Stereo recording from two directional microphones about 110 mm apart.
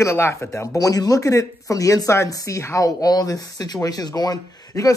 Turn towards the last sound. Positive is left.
turn(degrees=35)  # may be behind; listen again after turning